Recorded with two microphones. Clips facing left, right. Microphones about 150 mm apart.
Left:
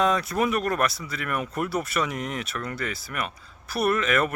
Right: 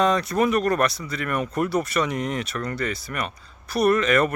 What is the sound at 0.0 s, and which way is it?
Speech, 5° left (ahead or behind).